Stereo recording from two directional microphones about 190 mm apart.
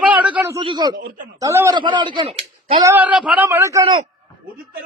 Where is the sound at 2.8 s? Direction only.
10° right (ahead or behind).